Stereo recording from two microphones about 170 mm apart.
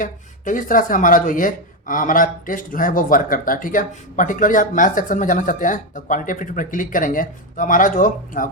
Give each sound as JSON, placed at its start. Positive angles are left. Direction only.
{"t": 0.0, "sound": "speech", "side_deg": 50}